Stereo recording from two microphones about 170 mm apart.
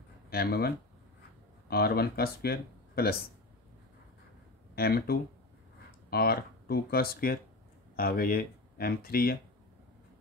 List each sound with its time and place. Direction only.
0.3 s speech: 65° left (ahead or behind)
4.7 s speech: 65° left (ahead or behind)